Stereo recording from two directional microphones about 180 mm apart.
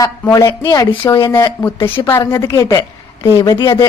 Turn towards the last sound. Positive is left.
turn(degrees=20)  # may be behind; listen again after turning